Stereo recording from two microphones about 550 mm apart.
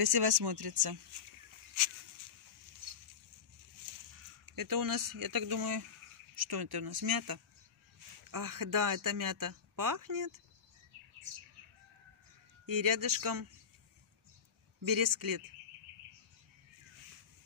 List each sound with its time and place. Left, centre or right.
0.0 s speech: right
4.5 s speech: right
11.1 s bird: right
12.6 s speech: right
14.8 s speech: right